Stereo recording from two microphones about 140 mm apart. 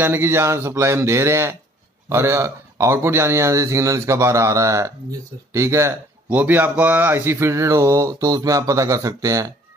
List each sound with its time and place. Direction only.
0.0 s speech: 15° right (ahead or behind)
2.0 s mantra: 20° right (ahead or behind)